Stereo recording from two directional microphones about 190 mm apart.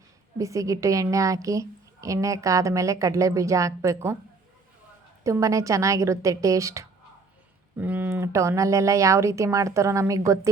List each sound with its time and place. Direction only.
0.3 s a woman's voice: 15° right (ahead or behind)
5.2 s a woman's voice: 15° right (ahead or behind)